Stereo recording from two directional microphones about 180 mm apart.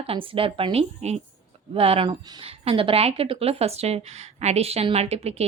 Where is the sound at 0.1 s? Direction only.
30° right (ahead or behind).